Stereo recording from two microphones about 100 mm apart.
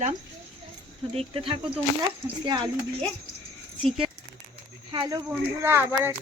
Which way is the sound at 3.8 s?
70° right (ahead or behind).